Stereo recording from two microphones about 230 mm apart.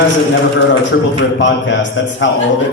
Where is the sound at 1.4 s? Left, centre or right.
Left.